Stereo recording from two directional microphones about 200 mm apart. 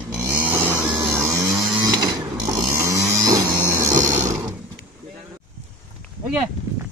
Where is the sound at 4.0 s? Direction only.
40° right (ahead or behind).